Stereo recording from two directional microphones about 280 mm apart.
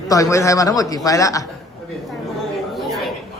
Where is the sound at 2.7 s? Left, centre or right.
Centre.